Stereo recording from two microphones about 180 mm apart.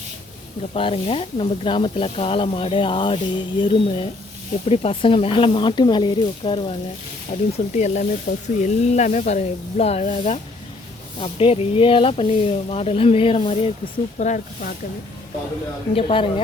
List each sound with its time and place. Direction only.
0.7 s speech: 30° left (ahead or behind)
16.0 s speech: 30° left (ahead or behind)